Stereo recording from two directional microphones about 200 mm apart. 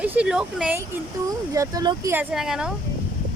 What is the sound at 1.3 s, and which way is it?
Speech, 15° right (ahead or behind).